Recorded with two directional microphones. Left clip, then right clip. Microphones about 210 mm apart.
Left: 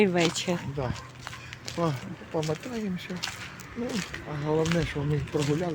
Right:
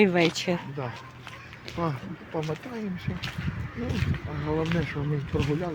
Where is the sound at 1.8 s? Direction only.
15° left (ahead or behind).